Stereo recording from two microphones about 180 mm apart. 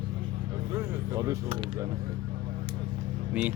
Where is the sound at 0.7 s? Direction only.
20° right (ahead or behind).